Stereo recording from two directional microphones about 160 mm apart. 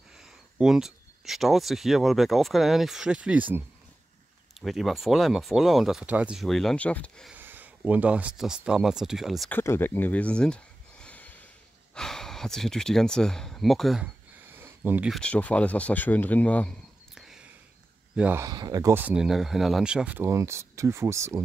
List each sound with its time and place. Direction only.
0.2 s speech: 5° right (ahead or behind)
7.2 s speech: 10° right (ahead or behind)
9.5 s a sound: 15° left (ahead or behind)
11.9 s speech: 5° left (ahead or behind)
14.3 s a sound: 15° right (ahead or behind)
15.1 s speech: 10° left (ahead or behind)
17.1 s a sound: 5° right (ahead or behind)
18.1 s speech: 10° right (ahead or behind)
18.4 s speech: 25° right (ahead or behind)
18.9 s speech: 5° right (ahead or behind)